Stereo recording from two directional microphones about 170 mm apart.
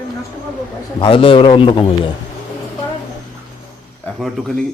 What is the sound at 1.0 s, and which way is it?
Speech, 30° left (ahead or behind).